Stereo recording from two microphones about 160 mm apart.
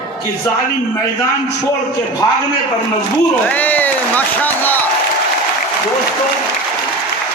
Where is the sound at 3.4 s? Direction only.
10° left (ahead or behind).